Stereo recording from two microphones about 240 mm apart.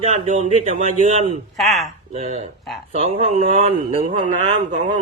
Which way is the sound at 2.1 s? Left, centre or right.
Right.